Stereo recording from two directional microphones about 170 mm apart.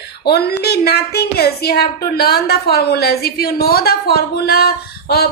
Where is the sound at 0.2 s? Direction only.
75° left (ahead or behind).